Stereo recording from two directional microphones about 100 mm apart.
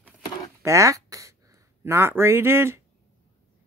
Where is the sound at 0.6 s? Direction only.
30° right (ahead or behind).